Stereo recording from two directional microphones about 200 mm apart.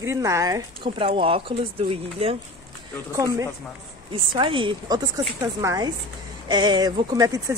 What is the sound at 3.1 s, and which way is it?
Speech, 15° right (ahead or behind).